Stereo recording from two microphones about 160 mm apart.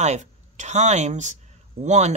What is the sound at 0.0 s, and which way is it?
Speech, 45° right (ahead or behind).